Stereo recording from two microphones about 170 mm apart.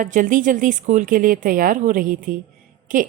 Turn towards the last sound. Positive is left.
turn(degrees=-50)  # may be behind; listen again after turning